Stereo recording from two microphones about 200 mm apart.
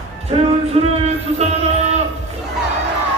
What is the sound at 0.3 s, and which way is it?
Music, 25° right (ahead or behind).